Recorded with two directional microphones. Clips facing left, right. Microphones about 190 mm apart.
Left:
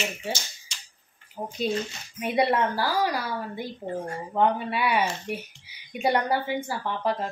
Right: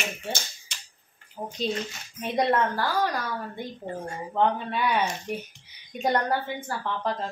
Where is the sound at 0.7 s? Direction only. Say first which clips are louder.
Right 1 dB; 55° right (ahead or behind).